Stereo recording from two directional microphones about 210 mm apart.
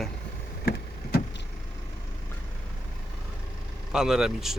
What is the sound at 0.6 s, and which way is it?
Vehicle, 50° left (ahead or behind).